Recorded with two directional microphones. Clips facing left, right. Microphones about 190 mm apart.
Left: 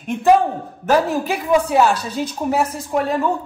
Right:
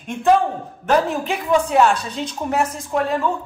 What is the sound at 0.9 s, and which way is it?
A woman's voice, 5° left (ahead or behind).